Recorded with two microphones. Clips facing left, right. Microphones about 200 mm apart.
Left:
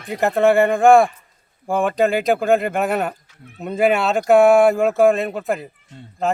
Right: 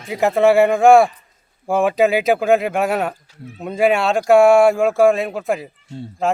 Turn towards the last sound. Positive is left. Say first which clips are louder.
# right 2 dB
turn(degrees=0)  # may be behind; listen again after turning